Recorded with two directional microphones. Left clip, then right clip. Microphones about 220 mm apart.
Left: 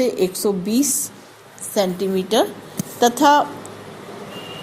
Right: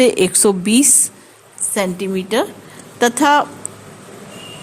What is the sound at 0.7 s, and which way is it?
Speech, 65° right (ahead or behind).